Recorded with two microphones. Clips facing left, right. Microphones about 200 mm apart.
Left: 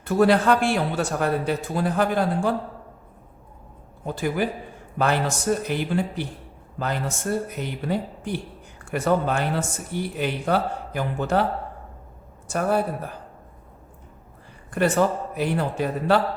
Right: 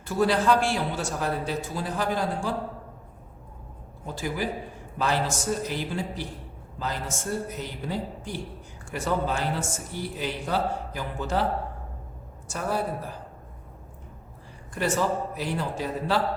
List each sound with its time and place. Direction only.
0.0 s a man's voice: 60° left (ahead or behind)
4.0 s a man's voice: 55° left (ahead or behind)
12.5 s a man's voice: 60° left (ahead or behind)
14.7 s a man's voice: 60° left (ahead or behind)